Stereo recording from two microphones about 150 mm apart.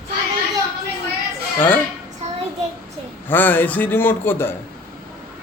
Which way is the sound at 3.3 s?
15° left (ahead or behind).